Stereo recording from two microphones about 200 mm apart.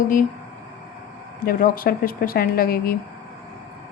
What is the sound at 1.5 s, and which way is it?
A woman's voice, 45° left (ahead or behind).